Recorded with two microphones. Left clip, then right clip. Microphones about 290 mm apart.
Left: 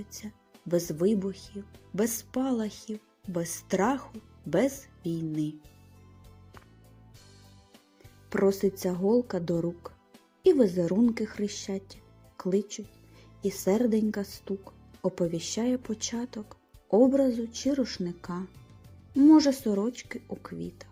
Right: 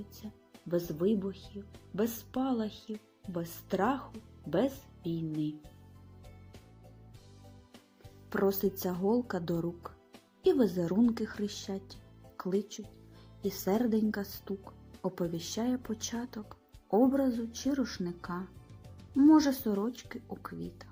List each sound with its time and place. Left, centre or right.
0.7 s speech: centre
8.3 s speech: centre
13.4 s speech: centre
16.4 s music: centre
17.5 s speech: centre